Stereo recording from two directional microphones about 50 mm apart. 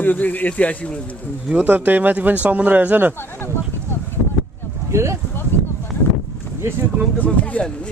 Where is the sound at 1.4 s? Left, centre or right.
Right.